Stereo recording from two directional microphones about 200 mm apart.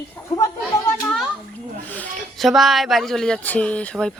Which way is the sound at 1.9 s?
5° left (ahead or behind).